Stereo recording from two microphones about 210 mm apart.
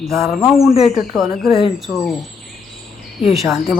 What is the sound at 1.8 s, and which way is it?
Speech, centre (ahead or behind).